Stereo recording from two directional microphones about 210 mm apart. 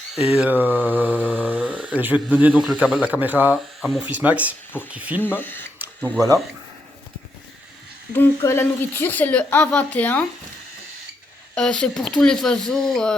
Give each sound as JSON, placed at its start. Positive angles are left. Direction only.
{"t": 0.2, "sound": "speech", "side_deg": -5}
{"t": 5.2, "sound": "speech", "side_deg": 10}
{"t": 6.1, "sound": "speech", "side_deg": -15}
{"t": 8.1, "sound": "speech", "side_deg": 10}
{"t": 11.5, "sound": "speech", "side_deg": 5}